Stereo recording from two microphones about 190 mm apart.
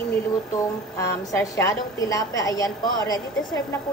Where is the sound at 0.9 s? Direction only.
15° left (ahead or behind).